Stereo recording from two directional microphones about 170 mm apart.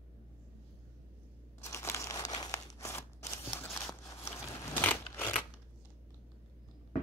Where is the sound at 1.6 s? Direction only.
15° left (ahead or behind).